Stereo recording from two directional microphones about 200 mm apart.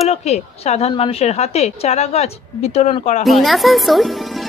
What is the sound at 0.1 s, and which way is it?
A woman's voice, 30° left (ahead or behind).